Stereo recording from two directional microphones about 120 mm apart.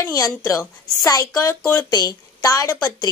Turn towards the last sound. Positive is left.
turn(degrees=30)  # may be behind; listen again after turning